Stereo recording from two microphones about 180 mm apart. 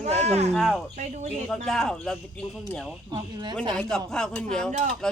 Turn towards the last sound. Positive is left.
turn(degrees=5)  # may be behind; listen again after turning